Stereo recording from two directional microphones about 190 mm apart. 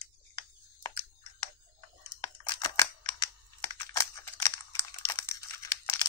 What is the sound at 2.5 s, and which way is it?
Crushing, 20° left (ahead or behind).